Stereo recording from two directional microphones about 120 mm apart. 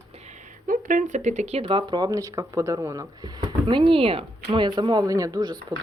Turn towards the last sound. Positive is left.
turn(degrees=-35)  # may be behind; listen again after turning